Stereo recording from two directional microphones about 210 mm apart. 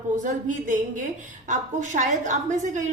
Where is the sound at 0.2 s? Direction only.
35° right (ahead or behind).